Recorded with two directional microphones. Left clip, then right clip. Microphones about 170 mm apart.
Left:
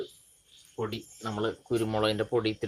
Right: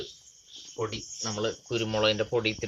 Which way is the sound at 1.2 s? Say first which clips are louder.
Right 1 dB; 50° left (ahead or behind).